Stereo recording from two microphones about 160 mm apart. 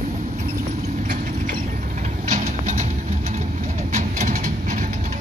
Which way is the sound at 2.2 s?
50° right (ahead or behind).